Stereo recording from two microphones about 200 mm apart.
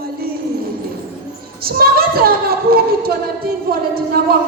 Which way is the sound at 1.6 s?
50° right (ahead or behind).